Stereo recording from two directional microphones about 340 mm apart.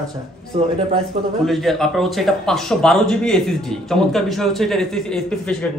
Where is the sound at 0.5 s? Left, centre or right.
Centre.